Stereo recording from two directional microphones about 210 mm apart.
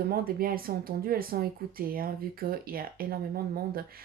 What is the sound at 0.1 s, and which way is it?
Speech, 45° right (ahead or behind).